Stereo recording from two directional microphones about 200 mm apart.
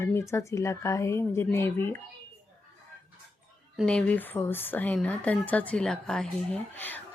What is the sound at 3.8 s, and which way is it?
Speech, 5° left (ahead or behind).